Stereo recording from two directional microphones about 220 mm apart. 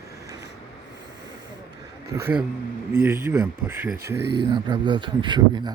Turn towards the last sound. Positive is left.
turn(degrees=-20)  # may be behind; listen again after turning